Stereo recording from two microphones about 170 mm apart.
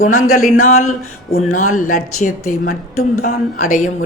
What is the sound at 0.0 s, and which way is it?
Speech, 50° left (ahead or behind).